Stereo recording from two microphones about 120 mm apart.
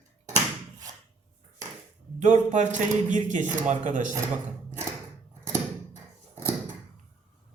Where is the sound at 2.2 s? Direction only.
90° right.